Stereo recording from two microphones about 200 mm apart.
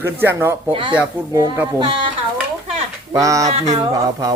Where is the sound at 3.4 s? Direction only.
35° right (ahead or behind).